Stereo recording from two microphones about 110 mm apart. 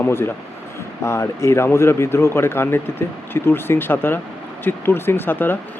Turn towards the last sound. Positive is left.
turn(degrees=20)  # may be behind; listen again after turning